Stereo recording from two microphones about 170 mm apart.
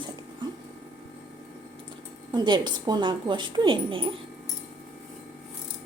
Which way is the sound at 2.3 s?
25° right (ahead or behind).